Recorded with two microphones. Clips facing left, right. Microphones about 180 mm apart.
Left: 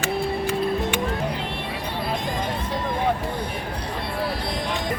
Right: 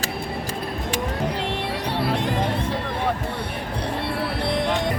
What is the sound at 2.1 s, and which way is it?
Music, 70° right (ahead or behind).